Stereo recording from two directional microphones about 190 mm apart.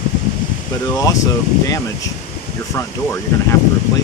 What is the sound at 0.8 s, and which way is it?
Speech, 15° left (ahead or behind).